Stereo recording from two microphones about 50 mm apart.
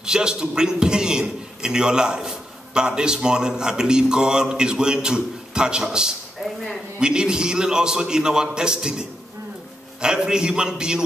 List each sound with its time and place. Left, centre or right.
0.0 s a man's voice: centre
6.4 s a sound: centre
7.0 s a man's voice: centre
10.0 s a man's voice: centre